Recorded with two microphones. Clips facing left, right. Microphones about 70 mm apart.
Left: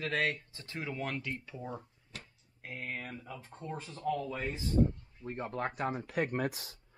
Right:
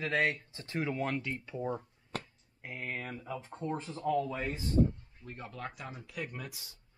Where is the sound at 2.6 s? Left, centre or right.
Centre.